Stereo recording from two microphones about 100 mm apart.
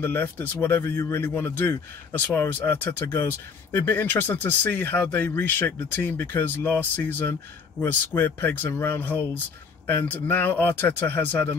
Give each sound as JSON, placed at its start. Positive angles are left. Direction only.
{"t": 0.0, "sound": "speech", "side_deg": 20}